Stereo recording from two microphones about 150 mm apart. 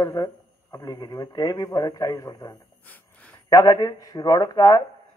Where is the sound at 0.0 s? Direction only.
25° left (ahead or behind).